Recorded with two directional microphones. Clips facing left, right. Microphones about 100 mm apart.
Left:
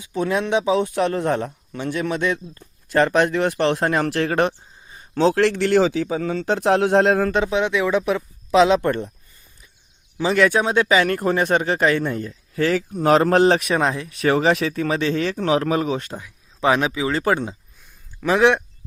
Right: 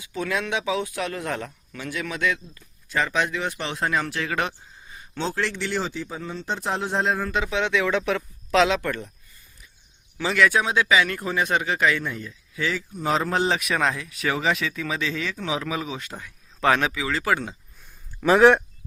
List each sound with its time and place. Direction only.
0.0 s speech: 30° left (ahead or behind)
2.9 s a man's voice: 55° left (ahead or behind)
4.3 s speech: 45° left (ahead or behind)
5.2 s speech: 70° left (ahead or behind)
7.3 s speech: 35° left (ahead or behind)
7.5 s speech: 10° left (ahead or behind)
8.6 s speech: 30° left (ahead or behind)
10.3 s speech: 35° left (ahead or behind); by 12.8 s 50° left (ahead or behind)
12.9 s a man's voice: 65° left (ahead or behind)
13.6 s speech: 30° left (ahead or behind); by 16.0 s 45° left (ahead or behind)
16.1 s speech: 15° left (ahead or behind)
18.2 s speech: 10° right (ahead or behind)